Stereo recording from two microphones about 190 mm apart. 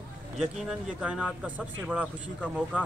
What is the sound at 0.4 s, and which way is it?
Speech, 5° right (ahead or behind).